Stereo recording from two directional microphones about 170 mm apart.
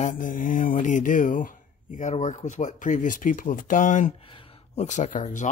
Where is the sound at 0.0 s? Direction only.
50° left (ahead or behind).